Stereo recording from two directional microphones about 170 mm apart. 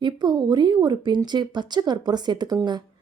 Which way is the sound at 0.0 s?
25° right (ahead or behind).